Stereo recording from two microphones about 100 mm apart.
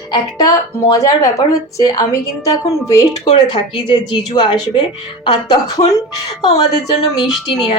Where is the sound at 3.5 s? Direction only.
45° left (ahead or behind).